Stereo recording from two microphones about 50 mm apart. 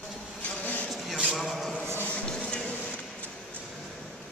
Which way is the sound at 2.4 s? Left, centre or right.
Left.